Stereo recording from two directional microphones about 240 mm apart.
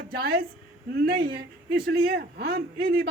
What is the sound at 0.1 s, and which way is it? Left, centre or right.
A man's voice, right.